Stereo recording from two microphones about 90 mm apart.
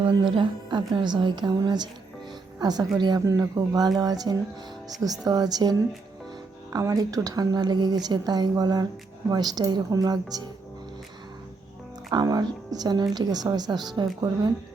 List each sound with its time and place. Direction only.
0.0 s a woman's voice: 60° right (ahead or behind)
6.7 s a woman's voice: 40° right (ahead or behind)
12.1 s a woman's voice: 45° right (ahead or behind)